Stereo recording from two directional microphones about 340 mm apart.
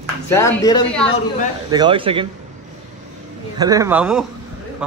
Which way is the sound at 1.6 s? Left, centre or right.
Centre.